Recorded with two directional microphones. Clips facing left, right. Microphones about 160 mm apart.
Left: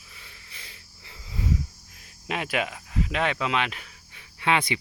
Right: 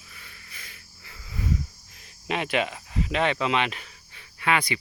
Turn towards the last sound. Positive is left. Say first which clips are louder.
# left 1 dB
turn(degrees=25)  # may be behind; listen again after turning